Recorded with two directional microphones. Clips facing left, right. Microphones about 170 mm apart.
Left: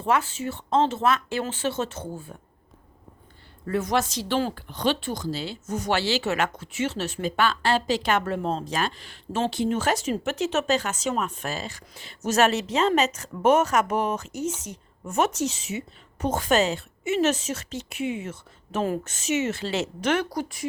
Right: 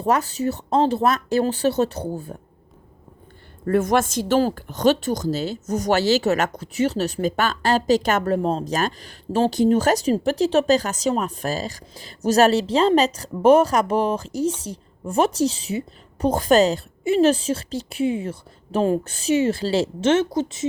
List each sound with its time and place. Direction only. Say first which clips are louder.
0.0 s a woman's voice: right 4 dB; 40° right (ahead or behind)
3.7 s a woman's voice: right 6 dB; 50° right (ahead or behind); by 20.7 s 25° right (ahead or behind)